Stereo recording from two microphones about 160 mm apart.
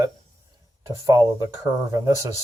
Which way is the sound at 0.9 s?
20° right (ahead or behind).